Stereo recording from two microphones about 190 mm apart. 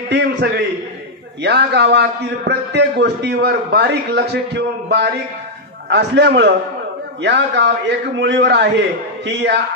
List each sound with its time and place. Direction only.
0.1 s a man's voice: 60° right (ahead or behind)